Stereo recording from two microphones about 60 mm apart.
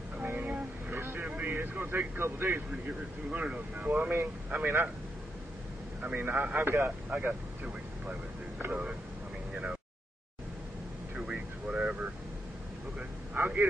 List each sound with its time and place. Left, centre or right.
0.2 s vehicle: right
1.2 s speech: right
3.3 s a man's voice: centre; by 4.7 s right
6.1 s a man's voice: right
7.1 s a man's voice: right
8.5 s a man's voice: right
11.1 s vehicle: centre
13.4 s a sound: right